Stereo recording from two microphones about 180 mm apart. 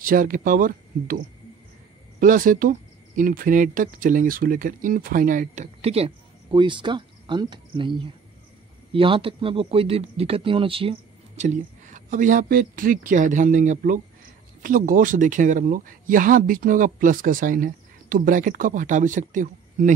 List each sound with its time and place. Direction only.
0.0 s speech: 50° right (ahead or behind)